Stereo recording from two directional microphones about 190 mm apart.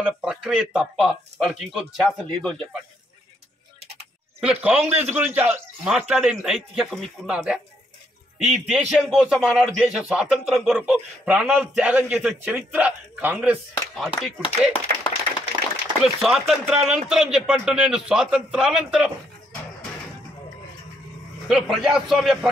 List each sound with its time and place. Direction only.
0.0 s speech: 5° right (ahead or behind)
3.8 s sheep: 35° right (ahead or behind)
4.4 s speech: 5° right (ahead or behind)
14.7 s clapping: 25° left (ahead or behind)
16.0 s speech: centre (ahead or behind)
21.5 s speech: centre (ahead or behind)